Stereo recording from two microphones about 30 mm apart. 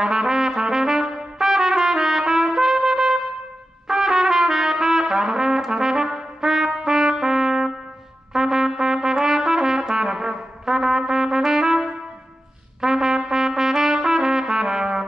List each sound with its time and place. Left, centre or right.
0.0 s trumpet: right